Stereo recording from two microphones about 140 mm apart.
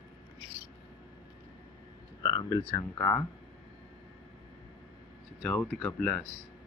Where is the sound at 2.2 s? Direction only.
25° left (ahead or behind).